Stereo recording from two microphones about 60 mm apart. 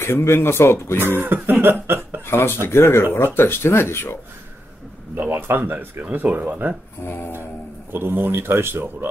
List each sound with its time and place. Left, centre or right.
0.0 s speech: left
0.9 s cough: right
2.2 s speech: left
5.1 s speech: right
7.9 s cough: right